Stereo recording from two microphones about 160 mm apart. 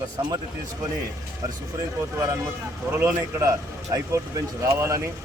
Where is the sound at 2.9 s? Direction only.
20° right (ahead or behind).